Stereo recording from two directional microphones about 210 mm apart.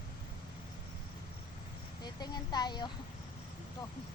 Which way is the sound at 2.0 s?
20° left (ahead or behind).